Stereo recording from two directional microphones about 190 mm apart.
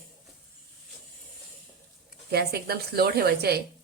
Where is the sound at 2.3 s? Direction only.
55° right (ahead or behind).